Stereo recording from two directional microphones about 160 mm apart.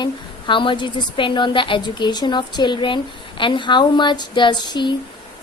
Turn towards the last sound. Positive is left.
turn(degrees=30)  # may be behind; listen again after turning